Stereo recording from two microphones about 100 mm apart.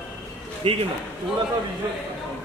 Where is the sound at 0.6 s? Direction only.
65° right (ahead or behind).